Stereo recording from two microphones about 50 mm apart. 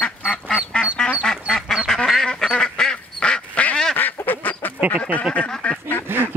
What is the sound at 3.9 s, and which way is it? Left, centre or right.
Duck, left.